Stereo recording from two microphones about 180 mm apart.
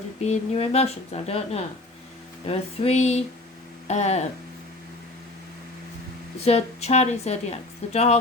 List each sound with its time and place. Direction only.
0.2 s a woman's voice: 35° left (ahead or behind)
6.4 s a woman's voice: 35° left (ahead or behind)